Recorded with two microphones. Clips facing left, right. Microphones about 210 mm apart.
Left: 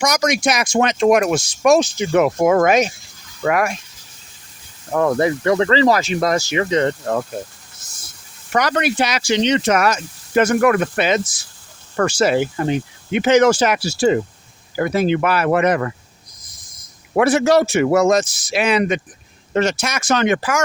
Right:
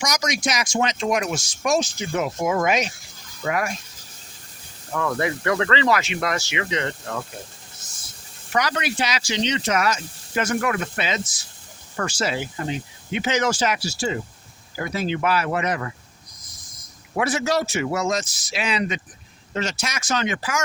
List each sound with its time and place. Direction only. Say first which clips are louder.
0.0 s speech: left 7 dB; 55° left (ahead or behind)
3.4 s speech: left 6 dB; 65° left (ahead or behind)
4.9 s speech: left 8 dB; 35° left (ahead or behind)
8.5 s speech: left 6 dB; 55° left (ahead or behind)
17.2 s speech: left 9 dB; 60° left (ahead or behind)